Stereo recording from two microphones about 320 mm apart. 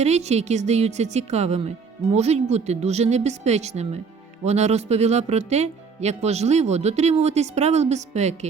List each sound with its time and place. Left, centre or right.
0.0 s speech: centre